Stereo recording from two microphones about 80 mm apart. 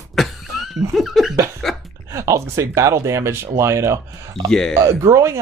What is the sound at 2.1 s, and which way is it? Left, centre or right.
Speech, right.